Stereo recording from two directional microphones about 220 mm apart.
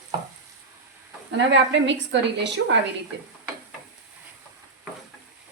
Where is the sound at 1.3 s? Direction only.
55° right (ahead or behind).